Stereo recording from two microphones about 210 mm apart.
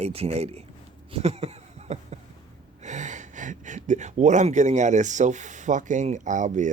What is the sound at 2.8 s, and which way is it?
Speech, 35° right (ahead or behind).